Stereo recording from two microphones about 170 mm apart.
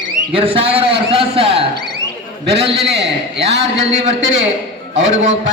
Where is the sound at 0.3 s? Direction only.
35° right (ahead or behind).